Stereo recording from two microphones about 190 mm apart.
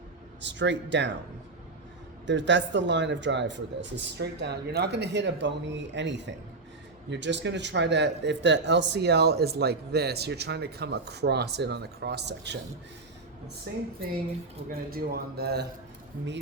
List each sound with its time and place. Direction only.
0.4 s speech: 70° right (ahead or behind)
2.2 s speech: 70° right (ahead or behind)
14.7 s a man's voice: 50° right (ahead or behind)